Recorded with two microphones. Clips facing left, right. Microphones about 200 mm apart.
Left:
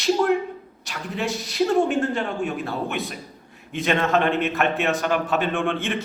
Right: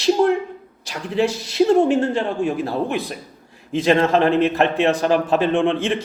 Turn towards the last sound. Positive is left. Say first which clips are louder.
# right 6 dB
turn(degrees=-30)  # may be behind; listen again after turning